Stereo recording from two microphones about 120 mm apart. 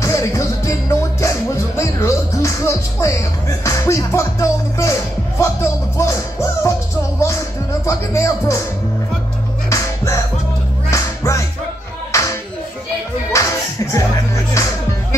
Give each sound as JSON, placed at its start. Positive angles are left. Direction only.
{"t": 0.0, "sound": "music", "side_deg": 25}
{"t": 1.8, "sound": "speech", "side_deg": 25}
{"t": 5.4, "sound": "music", "side_deg": 25}
{"t": 7.8, "sound": "music", "side_deg": 25}
{"t": 9.7, "sound": "music", "side_deg": 25}
{"t": 13.9, "sound": "music", "side_deg": 25}